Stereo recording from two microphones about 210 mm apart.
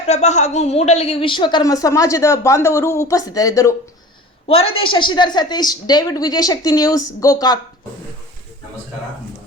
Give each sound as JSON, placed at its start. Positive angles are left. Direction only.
{"t": 0.1, "sound": "a woman's voice", "side_deg": 35}
{"t": 4.4, "sound": "a woman's voice", "side_deg": 25}